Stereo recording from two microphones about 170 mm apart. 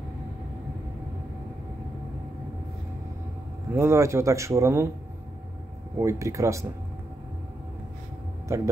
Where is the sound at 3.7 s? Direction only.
15° right (ahead or behind).